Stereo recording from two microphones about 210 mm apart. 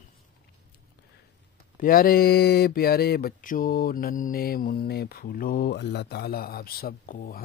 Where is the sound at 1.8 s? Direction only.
40° left (ahead or behind).